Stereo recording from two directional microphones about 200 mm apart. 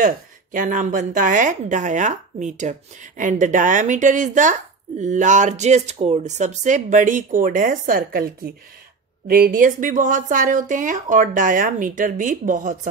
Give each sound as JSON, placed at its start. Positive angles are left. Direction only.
{"t": 0.0, "sound": "a woman's voice", "side_deg": -40}